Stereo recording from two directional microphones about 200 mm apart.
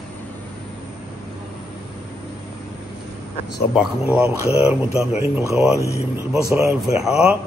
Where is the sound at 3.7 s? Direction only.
Centre (ahead or behind).